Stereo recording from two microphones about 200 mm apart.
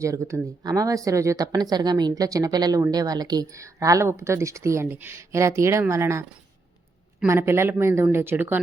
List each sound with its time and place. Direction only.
0.0 s speech: 15° right (ahead or behind)